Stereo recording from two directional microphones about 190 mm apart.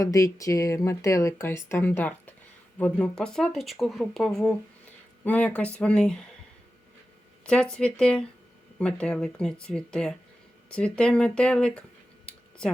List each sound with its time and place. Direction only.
0.0 s speech: 15° left (ahead or behind)
7.4 s speech: 5° left (ahead or behind)